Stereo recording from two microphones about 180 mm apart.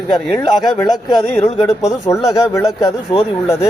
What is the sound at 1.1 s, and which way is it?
Speech, 35° left (ahead or behind).